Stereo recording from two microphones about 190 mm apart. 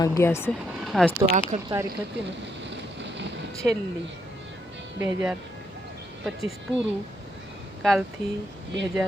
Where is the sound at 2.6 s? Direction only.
70° right (ahead or behind).